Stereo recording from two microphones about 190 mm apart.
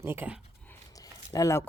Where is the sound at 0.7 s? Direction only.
20° left (ahead or behind).